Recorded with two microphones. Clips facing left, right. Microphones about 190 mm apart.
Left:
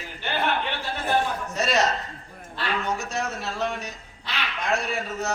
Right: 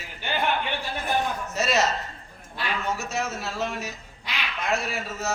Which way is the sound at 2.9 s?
5° right (ahead or behind).